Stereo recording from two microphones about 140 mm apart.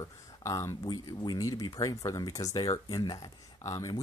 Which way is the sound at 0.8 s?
30° left (ahead or behind).